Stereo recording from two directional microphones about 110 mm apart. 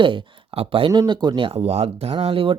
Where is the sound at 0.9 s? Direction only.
40° right (ahead or behind).